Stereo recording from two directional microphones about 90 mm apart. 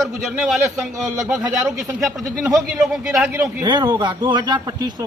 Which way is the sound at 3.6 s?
55° right (ahead or behind).